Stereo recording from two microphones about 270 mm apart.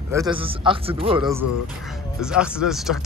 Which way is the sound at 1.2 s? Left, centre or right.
Centre.